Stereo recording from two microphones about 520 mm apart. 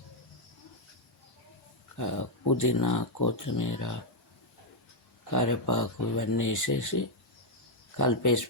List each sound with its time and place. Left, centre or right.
2.0 s speech: left
5.3 s speech: left